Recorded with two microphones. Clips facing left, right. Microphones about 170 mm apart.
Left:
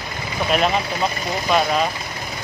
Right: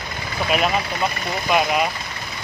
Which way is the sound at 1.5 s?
10° right (ahead or behind).